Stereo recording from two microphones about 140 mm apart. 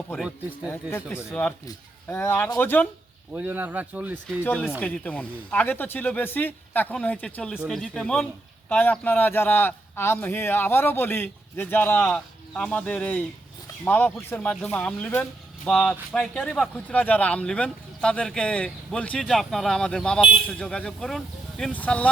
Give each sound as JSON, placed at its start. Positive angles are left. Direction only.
{"t": 0.7, "sound": "speech", "side_deg": 15}
{"t": 3.3, "sound": "speech", "side_deg": -10}
{"t": 4.4, "sound": "speech", "side_deg": 15}